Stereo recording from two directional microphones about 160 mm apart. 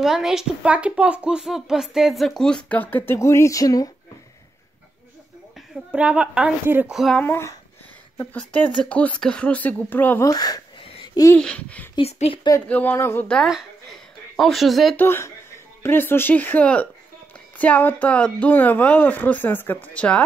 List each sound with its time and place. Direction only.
0.0 s speech: 5° right (ahead or behind); by 3.9 s 20° left (ahead or behind)
5.9 s a woman's voice: 5° right (ahead or behind)
7.0 s speech: centre (ahead or behind)
7.2 s speech: 15° left (ahead or behind)
10.2 s speech: 25° left (ahead or behind)
11.3 s speech: 5° left (ahead or behind)
11.9 s speech: 40° left (ahead or behind)
12.6 s a woman's voice: 10° left (ahead or behind)
15.0 s speech: 15° left (ahead or behind)